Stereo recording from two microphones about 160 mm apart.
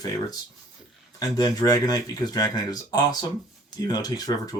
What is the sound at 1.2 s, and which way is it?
Speech, 25° left (ahead or behind).